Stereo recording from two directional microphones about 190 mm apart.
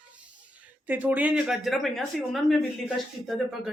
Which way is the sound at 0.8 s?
10° right (ahead or behind).